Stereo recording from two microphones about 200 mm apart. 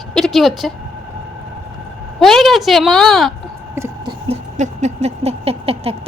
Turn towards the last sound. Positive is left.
turn(degrees=-30)  # may be behind; listen again after turning